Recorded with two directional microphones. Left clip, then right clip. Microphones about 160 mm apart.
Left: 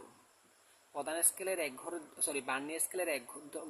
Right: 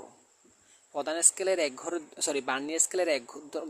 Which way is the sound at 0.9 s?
50° right (ahead or behind).